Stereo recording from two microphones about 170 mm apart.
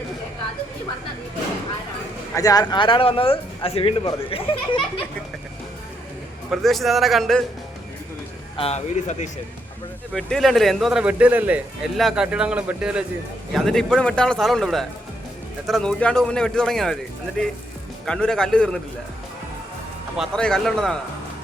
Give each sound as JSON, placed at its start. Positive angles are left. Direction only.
{"t": 2.3, "sound": "speech", "side_deg": 20}
{"t": 6.5, "sound": "a man's voice", "side_deg": 0}
{"t": 8.5, "sound": "speech", "side_deg": 40}
{"t": 10.2, "sound": "a man's voice", "side_deg": 0}
{"t": 20.1, "sound": "a man's voice", "side_deg": 5}